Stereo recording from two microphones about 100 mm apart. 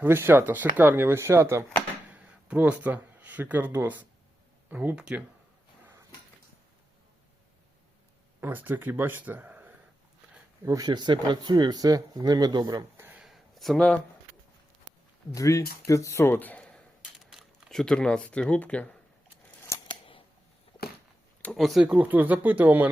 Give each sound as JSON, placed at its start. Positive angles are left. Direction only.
{"t": 0.0, "sound": "speech", "side_deg": -20}
{"t": 2.0, "sound": "speech", "side_deg": -15}
{"t": 8.4, "sound": "speech", "side_deg": -20}
{"t": 10.7, "sound": "speech", "side_deg": -40}
{"t": 13.1, "sound": "a sound", "side_deg": 0}
{"t": 15.3, "sound": "speech", "side_deg": 35}
{"t": 19.9, "sound": "scissors", "side_deg": 60}
{"t": 21.5, "sound": "speech", "side_deg": 0}
{"t": 21.8, "sound": "speech", "side_deg": -15}